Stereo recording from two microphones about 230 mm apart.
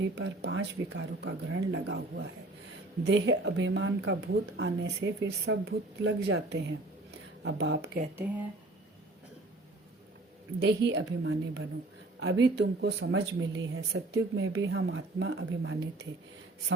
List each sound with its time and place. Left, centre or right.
0.0 s speech: right
10.6 s a woman's voice: right